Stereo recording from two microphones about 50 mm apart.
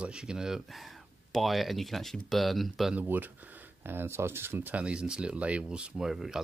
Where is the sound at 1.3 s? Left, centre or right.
Centre.